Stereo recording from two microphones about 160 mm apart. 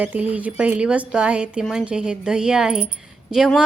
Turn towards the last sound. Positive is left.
turn(degrees=-5)  # may be behind; listen again after turning